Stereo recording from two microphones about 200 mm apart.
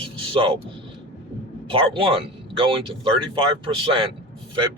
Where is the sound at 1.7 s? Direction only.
25° right (ahead or behind).